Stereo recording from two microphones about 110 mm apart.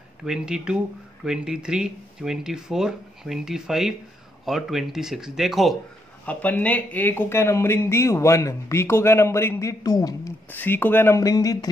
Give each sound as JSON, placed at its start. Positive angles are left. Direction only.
{"t": 0.2, "sound": "speech", "side_deg": -5}
{"t": 6.2, "sound": "speech", "side_deg": 15}
{"t": 10.5, "sound": "speech", "side_deg": 15}